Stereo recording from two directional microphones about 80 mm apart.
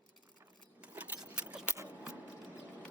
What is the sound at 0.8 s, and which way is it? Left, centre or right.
Keys jangling, centre.